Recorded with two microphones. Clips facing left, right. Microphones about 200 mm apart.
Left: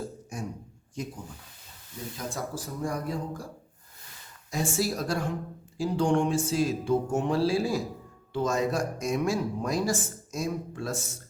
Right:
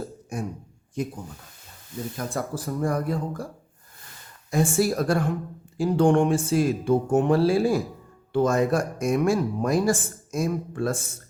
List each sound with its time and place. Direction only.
0.3 s speech: 55° right (ahead or behind)
2.1 s speech: 60° right (ahead or behind)
4.5 s speech: 55° right (ahead or behind)